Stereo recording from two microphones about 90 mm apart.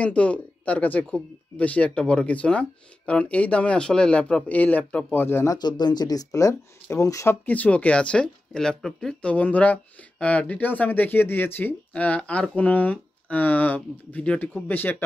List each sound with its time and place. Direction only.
0.0 s speech: 15° left (ahead or behind)
5.5 s speech: 50° left (ahead or behind); by 7.3 s 35° left (ahead or behind)
7.4 s speech: 15° left (ahead or behind)